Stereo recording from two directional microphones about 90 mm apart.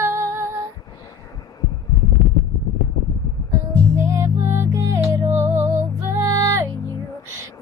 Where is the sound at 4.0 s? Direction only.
35° right (ahead or behind).